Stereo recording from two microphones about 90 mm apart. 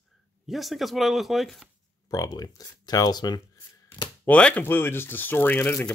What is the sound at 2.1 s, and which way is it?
Speech, 45° left (ahead or behind).